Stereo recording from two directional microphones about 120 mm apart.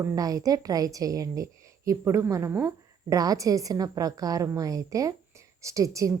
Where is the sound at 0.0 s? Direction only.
30° right (ahead or behind).